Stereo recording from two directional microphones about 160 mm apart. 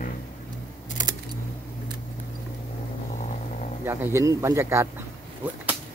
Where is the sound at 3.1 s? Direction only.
50° left (ahead or behind).